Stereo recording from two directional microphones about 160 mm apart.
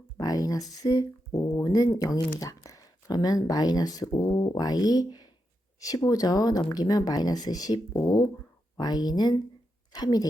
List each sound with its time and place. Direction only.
0.2 s speech: 25° left (ahead or behind)